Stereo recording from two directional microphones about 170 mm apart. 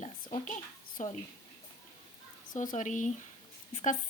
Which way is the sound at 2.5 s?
45° left (ahead or behind).